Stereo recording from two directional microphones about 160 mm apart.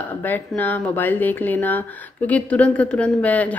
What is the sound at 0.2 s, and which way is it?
Speech, 10° left (ahead or behind).